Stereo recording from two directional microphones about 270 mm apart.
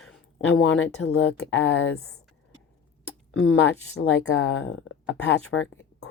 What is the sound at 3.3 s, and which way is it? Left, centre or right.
Speech, left.